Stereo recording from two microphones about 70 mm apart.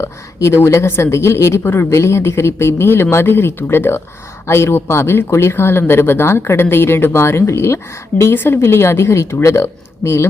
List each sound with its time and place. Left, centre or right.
0.0 s a woman's voice: left